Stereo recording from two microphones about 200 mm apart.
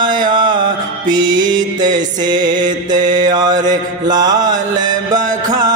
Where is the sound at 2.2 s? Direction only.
20° right (ahead or behind).